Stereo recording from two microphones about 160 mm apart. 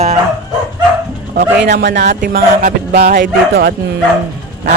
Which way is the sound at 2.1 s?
65° right (ahead or behind).